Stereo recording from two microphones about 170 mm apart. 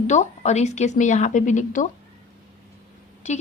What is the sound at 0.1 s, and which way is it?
A woman's voice, 40° left (ahead or behind).